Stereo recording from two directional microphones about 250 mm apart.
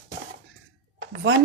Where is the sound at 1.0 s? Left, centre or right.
Right.